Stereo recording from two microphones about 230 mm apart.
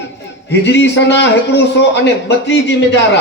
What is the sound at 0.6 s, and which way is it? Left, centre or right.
Speech, left.